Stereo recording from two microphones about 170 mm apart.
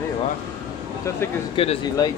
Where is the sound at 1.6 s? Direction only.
30° left (ahead or behind).